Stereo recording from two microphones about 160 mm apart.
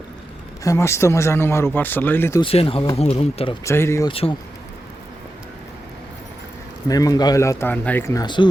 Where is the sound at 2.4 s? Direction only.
35° left (ahead or behind).